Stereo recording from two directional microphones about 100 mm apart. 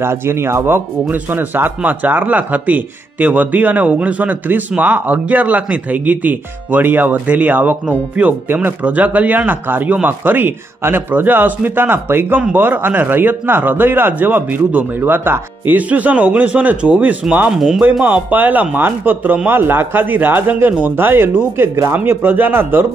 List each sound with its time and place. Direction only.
0.0 s a man's voice: 25° right (ahead or behind); by 17.8 s 5° right (ahead or behind)
18.0 s a man's voice: 15° right (ahead or behind)